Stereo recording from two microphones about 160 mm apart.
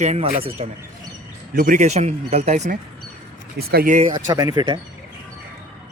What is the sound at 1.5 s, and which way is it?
Speech, 55° right (ahead or behind).